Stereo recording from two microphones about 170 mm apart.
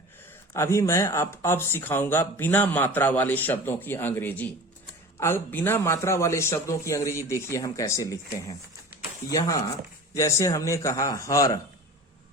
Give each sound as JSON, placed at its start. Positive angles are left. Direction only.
{"t": 0.5, "sound": "a man's voice", "side_deg": 15}